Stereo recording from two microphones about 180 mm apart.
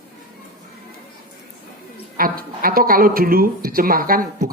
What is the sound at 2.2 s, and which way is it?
Speech, 55° right (ahead or behind).